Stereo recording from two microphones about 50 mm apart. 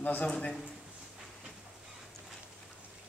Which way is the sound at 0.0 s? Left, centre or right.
Left.